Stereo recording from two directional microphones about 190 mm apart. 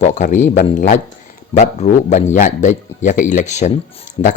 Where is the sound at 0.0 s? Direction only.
40° left (ahead or behind).